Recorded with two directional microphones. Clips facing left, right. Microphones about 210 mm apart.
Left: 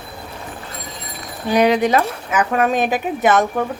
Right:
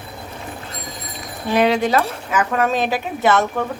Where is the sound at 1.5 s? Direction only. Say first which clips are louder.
Left 2 dB; 15° left (ahead or behind).